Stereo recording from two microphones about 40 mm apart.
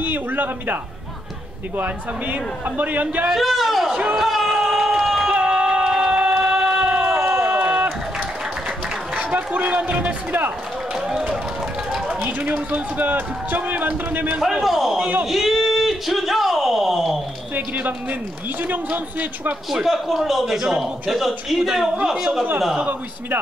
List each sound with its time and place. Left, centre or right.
0.0 s a man's voice: right
2.8 s a man's voice: right
3.3 s a man's voice: centre
3.9 s speech: right
4.2 s speech: centre
4.5 s a sound: centre
5.0 s crowd: centre
5.5 s a sound: centre
9.1 s a man's voice: right
12.2 s a man's voice: right
14.6 s a man's voice: centre
15.2 s a sound: centre
17.6 s a man's voice: right
19.7 s a man's voice: centre